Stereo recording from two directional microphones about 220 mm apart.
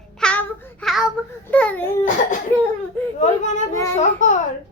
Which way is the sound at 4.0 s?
35° left (ahead or behind).